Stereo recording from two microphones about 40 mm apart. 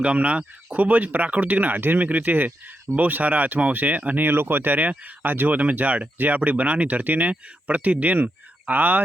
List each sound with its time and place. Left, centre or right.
0.0 s speech: right
4.3 s speech: right